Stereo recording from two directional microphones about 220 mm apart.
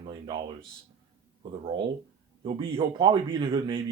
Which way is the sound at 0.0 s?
25° right (ahead or behind).